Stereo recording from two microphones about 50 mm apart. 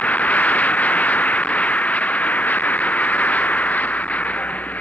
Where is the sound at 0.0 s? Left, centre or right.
Left.